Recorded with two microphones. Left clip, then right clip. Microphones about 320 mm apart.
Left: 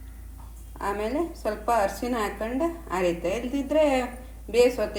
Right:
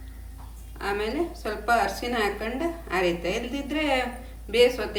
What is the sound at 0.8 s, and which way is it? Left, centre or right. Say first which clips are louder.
A woman's voice: even; centre.